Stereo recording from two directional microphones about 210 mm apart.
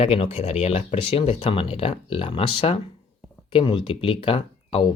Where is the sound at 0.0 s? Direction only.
30° left (ahead or behind).